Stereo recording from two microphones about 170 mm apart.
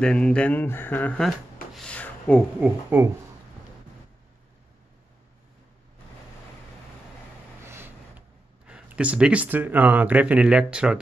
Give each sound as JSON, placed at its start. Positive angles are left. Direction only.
{"t": 0.0, "sound": "speech", "side_deg": 5}
{"t": 2.6, "sound": "speech", "side_deg": -10}
{"t": 7.6, "sound": "vehicle", "side_deg": -15}
{"t": 8.6, "sound": "speech", "side_deg": -5}